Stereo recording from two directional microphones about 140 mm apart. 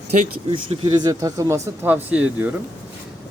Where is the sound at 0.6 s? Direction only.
35° right (ahead or behind).